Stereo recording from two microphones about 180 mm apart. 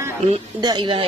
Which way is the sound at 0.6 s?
25° right (ahead or behind).